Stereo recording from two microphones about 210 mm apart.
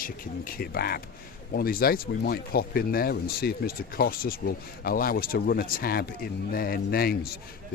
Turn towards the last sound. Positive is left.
turn(degrees=45)  # may be behind; listen again after turning